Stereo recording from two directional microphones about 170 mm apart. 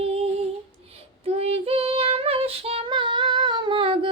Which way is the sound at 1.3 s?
35° right (ahead or behind).